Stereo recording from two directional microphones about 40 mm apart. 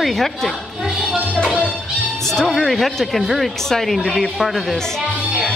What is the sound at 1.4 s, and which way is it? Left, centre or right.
Music, right.